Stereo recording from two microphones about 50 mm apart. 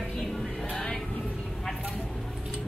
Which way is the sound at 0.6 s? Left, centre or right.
Centre.